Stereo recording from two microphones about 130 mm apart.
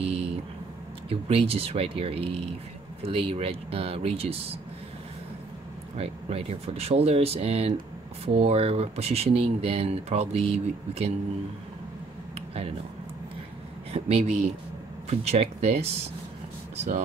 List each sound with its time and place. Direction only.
0.0 s a sound: 50° right (ahead or behind)
1.0 s speech: 45° right (ahead or behind)
5.9 s speech: 50° right (ahead or behind)
13.9 s speech: 55° right (ahead or behind)